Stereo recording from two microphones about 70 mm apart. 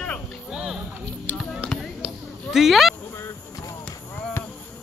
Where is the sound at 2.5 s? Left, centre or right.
Centre.